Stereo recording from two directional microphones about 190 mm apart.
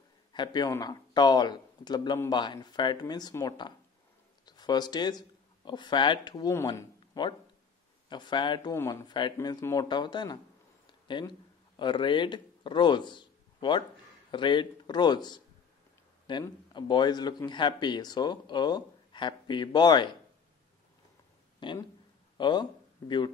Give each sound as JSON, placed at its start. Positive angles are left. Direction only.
{"t": 0.3, "sound": "a man's voice", "side_deg": 25}
{"t": 21.5, "sound": "speech", "side_deg": 25}